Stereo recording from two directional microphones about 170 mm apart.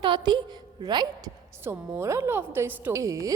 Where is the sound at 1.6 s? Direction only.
15° right (ahead or behind).